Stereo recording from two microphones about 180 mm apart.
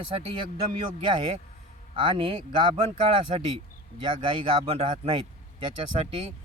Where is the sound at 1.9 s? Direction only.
30° right (ahead or behind).